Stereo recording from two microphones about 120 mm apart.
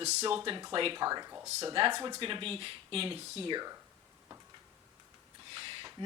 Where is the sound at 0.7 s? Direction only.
45° right (ahead or behind).